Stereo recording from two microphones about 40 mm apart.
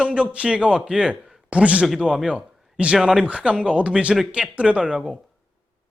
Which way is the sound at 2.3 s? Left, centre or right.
Right.